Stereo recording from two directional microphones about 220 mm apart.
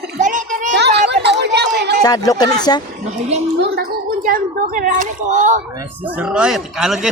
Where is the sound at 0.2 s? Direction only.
35° right (ahead or behind).